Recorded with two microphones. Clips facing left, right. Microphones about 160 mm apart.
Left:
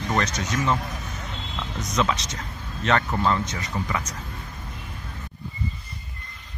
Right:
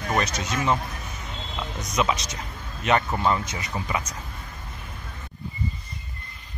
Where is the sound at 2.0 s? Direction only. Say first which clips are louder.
Even; 10° right (ahead or behind).